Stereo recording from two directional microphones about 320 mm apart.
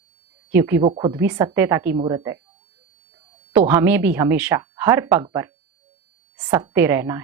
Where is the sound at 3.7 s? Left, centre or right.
Centre.